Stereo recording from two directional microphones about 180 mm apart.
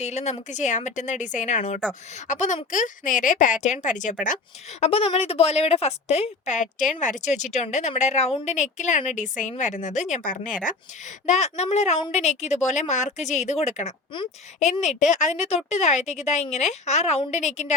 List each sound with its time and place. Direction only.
0.0 s a woman's voice: 40° left (ahead or behind)
4.8 s a woman's voice: 35° left (ahead or behind)